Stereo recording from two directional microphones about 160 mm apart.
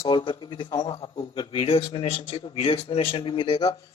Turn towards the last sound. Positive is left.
turn(degrees=30)  # may be behind; listen again after turning